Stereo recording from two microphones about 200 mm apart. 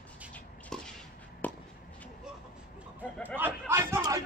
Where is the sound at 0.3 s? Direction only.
5° left (ahead or behind).